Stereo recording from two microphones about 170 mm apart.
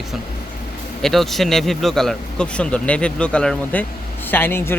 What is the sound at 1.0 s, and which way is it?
Speech, centre (ahead or behind).